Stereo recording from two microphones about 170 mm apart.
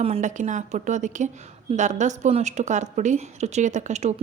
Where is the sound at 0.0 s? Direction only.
40° right (ahead or behind).